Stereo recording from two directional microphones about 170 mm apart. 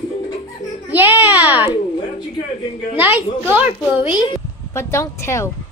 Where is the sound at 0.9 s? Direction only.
10° right (ahead or behind).